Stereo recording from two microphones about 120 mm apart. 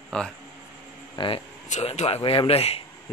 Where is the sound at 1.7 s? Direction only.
60° left (ahead or behind).